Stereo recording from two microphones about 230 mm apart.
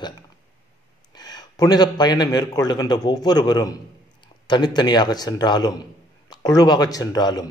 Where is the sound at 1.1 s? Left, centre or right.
Centre.